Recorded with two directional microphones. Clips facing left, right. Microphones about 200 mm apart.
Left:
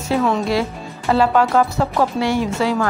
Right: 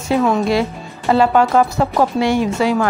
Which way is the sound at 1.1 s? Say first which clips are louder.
Right 2 dB; 20° right (ahead or behind).